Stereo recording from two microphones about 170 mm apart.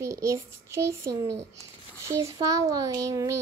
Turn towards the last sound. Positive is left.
turn(degrees=-20)  # may be behind; listen again after turning